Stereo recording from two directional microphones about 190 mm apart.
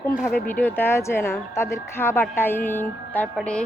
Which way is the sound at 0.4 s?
10° left (ahead or behind).